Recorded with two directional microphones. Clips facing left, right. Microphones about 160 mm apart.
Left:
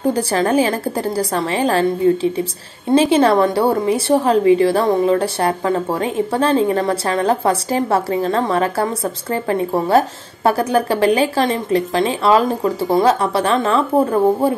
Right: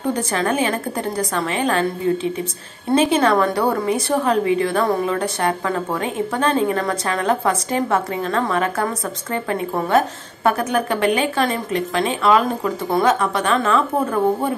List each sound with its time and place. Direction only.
0.0 s a woman's voice: 30° left (ahead or behind)
2.9 s a woman's voice: 30° left (ahead or behind)